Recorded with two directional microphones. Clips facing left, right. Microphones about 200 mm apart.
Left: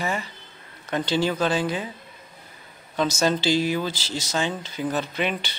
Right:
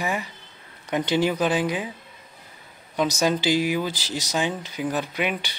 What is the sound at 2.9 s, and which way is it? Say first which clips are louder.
Speech: even; 15° right (ahead or behind).